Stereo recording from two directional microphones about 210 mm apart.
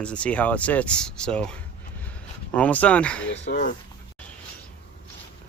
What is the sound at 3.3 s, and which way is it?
Speech, 55° left (ahead or behind).